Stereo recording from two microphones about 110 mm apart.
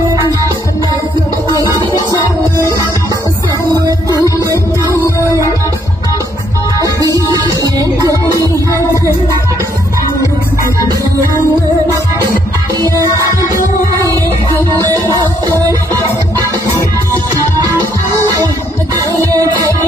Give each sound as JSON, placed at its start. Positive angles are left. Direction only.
{"t": 4.1, "sound": "music", "side_deg": -30}
{"t": 7.2, "sound": "music", "side_deg": -40}
{"t": 13.2, "sound": "music", "side_deg": -30}
{"t": 14.7, "sound": "music", "side_deg": -35}
{"t": 18.9, "sound": "music", "side_deg": -30}